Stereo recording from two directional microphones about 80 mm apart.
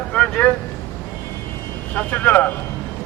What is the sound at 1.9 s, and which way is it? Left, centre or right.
Speech, left.